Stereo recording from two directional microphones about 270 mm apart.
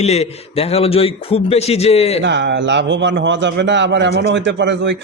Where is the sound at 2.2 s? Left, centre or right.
Right.